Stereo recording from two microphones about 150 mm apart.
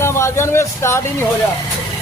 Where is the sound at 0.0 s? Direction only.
15° left (ahead or behind).